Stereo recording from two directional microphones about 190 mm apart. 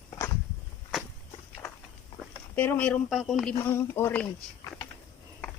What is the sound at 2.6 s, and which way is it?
Speech, 10° left (ahead or behind).